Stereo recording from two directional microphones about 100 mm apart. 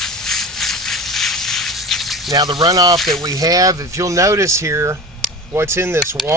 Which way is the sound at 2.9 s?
Centre (ahead or behind).